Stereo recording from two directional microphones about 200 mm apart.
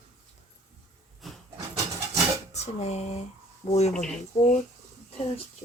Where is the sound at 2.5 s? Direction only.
35° left (ahead or behind).